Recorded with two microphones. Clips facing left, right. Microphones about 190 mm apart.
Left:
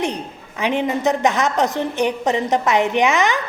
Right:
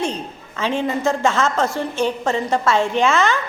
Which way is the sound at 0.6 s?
20° left (ahead or behind).